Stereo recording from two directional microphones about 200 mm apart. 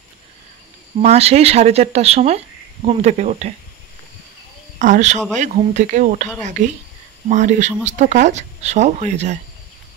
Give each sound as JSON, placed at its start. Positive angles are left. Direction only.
{"t": 1.0, "sound": "speech", "side_deg": -30}
{"t": 4.7, "sound": "speech", "side_deg": -40}